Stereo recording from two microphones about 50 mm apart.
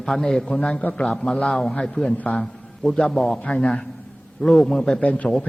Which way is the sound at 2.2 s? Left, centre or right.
Left.